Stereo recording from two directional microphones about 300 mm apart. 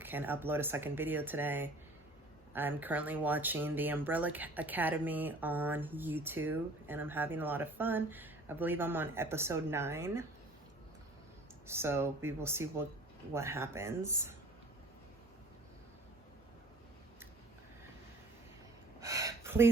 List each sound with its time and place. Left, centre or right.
0.0 s speech: centre
11.7 s speech: centre
18.9 s a sound: centre